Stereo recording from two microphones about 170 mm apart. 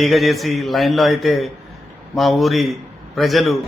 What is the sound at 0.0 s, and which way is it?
Speech, centre (ahead or behind).